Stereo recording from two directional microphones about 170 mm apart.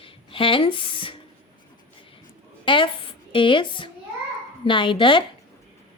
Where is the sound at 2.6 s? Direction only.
30° left (ahead or behind).